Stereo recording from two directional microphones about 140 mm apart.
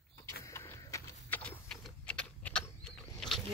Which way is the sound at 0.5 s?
20° left (ahead or behind).